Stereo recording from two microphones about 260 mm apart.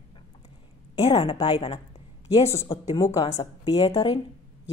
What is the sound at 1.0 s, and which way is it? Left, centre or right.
A woman's voice, left.